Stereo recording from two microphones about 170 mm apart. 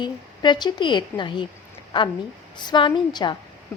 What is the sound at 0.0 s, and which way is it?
A woman's voice, 25° left (ahead or behind).